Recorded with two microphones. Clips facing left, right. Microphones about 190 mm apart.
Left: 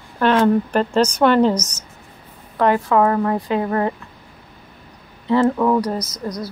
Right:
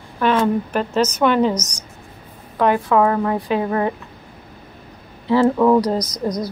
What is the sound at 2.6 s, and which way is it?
A woman's voice, 5° right (ahead or behind).